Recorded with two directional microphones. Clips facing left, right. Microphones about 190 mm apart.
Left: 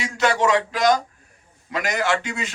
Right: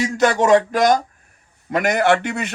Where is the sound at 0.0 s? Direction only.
50° right (ahead or behind).